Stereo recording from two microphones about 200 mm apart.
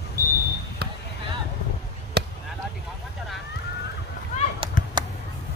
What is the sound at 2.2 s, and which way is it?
Basketball bounce, 55° right (ahead or behind).